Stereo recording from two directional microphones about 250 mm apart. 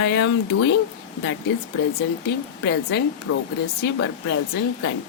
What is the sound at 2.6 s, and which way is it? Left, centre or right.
Speech, left.